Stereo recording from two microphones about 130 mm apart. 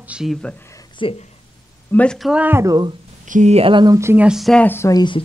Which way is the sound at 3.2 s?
75° right (ahead or behind).